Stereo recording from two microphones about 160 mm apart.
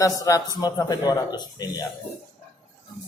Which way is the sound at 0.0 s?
20° left (ahead or behind).